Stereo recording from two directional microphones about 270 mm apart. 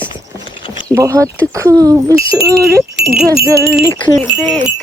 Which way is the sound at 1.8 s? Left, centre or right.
Centre.